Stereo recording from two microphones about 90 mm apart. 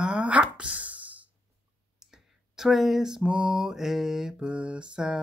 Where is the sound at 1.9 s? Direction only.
5° right (ahead or behind).